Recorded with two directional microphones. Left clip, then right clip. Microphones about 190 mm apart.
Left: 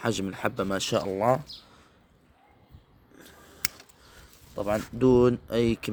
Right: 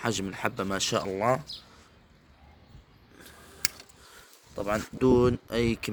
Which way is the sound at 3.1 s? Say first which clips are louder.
Even; 25° left (ahead or behind).